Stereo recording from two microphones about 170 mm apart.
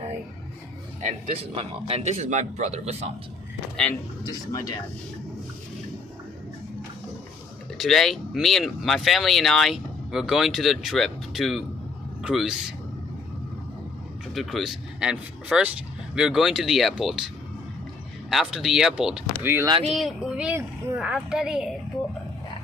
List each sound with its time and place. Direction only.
1.0 s speech: 35° right (ahead or behind)
7.8 s speech: centre (ahead or behind)
14.3 s speech: centre (ahead or behind)
18.3 s speech: centre (ahead or behind)
19.9 s speech: centre (ahead or behind)